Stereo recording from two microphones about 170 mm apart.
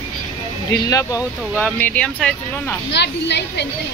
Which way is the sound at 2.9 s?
85° left.